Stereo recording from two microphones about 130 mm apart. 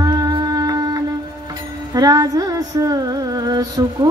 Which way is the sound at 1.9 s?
30° right (ahead or behind).